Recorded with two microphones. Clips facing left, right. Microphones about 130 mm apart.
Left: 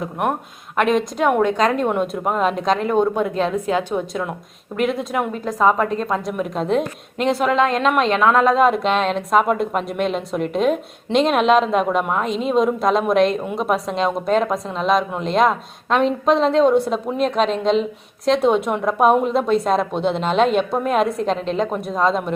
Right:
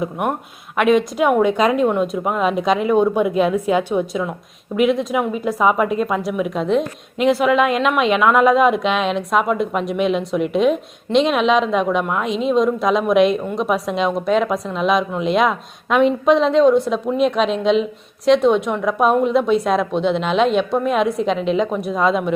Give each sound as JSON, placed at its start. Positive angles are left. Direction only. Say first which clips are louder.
{"t": 0.0, "sound": "a woman's voice", "louder": "right 1 dB", "side_deg": 0}
{"t": 6.6, "sound": "a woman's voice", "louder": "right 1 dB", "side_deg": 45}
{"t": 7.2, "sound": "a woman's voice", "louder": "right 2 dB", "side_deg": -5}